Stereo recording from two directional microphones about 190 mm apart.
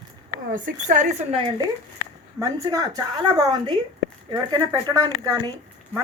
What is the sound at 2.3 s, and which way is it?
A woman's voice, 20° right (ahead or behind).